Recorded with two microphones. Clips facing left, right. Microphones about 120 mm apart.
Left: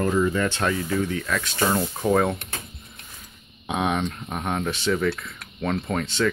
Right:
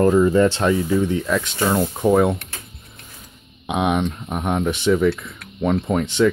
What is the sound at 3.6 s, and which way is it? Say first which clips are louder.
Speech: right 4 dB; 15° right (ahead or behind).